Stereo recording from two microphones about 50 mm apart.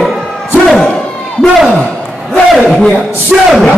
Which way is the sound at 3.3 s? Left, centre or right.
Centre.